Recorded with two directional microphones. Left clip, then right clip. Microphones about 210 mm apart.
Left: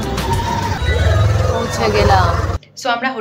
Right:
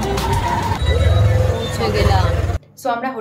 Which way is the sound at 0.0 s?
Centre (ahead or behind).